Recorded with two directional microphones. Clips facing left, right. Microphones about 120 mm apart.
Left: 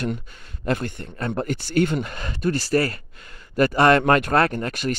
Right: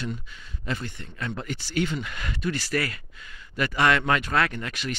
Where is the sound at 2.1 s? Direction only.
35° left (ahead or behind).